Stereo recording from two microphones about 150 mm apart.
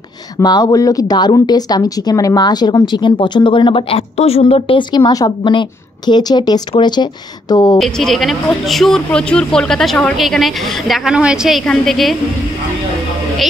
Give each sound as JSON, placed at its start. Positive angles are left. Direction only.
{"t": 0.4, "sound": "speech", "side_deg": 25}
{"t": 7.8, "sound": "speech", "side_deg": 0}